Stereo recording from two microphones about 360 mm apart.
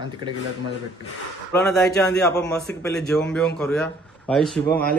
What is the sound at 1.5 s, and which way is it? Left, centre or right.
A man's voice, centre.